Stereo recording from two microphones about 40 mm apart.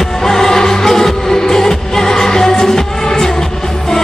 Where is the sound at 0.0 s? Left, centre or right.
Centre.